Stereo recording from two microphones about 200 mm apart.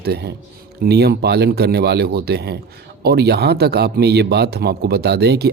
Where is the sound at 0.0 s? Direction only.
55° right (ahead or behind).